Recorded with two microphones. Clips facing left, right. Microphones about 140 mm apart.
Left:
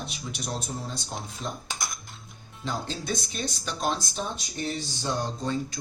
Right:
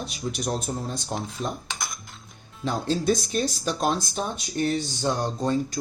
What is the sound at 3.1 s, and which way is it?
Speech, 45° right (ahead or behind).